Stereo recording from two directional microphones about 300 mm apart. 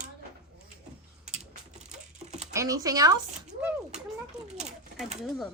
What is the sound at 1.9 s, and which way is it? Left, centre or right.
Typing, right.